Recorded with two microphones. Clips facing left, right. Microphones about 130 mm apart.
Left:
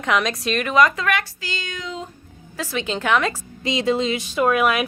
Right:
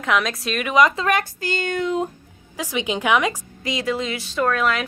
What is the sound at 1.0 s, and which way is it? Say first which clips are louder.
Speech: right 3 dB; 45° right (ahead or behind).